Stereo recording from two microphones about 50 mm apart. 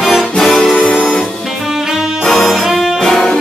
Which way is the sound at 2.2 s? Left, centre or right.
Centre.